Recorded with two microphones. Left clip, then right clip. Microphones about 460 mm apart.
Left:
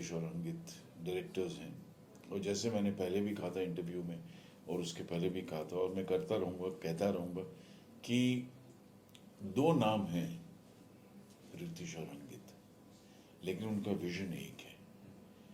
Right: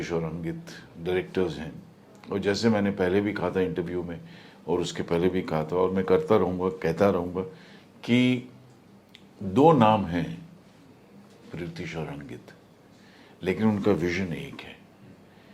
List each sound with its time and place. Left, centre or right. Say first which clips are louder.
0.0 s speech: right 13 dB; right
4.9 s speech: right 14 dB; right
8.0 s speech: right 12 dB; right
9.6 s speech: right 14 dB; right
11.5 s speech: right 12 dB; right
13.4 s speech: right 16 dB; right